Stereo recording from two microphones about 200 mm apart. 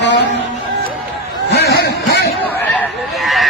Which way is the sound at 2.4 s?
5° left (ahead or behind).